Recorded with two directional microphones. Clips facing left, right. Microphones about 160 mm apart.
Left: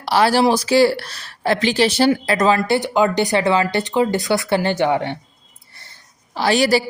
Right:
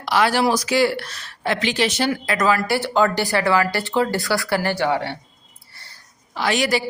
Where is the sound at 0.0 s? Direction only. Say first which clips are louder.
Left 3 dB; 35° left (ahead or behind).